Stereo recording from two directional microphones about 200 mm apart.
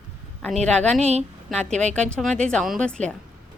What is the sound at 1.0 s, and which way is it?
Speech, 30° right (ahead or behind).